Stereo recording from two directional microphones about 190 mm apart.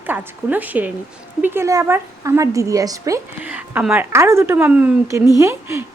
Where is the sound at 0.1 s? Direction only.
10° right (ahead or behind).